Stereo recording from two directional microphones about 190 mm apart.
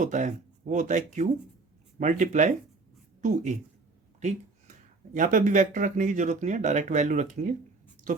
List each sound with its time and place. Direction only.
0.0 s a woman's voice: 40° right (ahead or behind)
5.1 s speech: 45° right (ahead or behind)